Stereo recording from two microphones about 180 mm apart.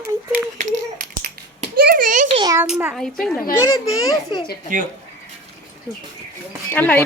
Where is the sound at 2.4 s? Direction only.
20° right (ahead or behind).